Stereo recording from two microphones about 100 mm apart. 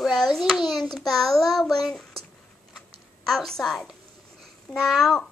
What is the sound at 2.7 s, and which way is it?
Typing, 5° left (ahead or behind).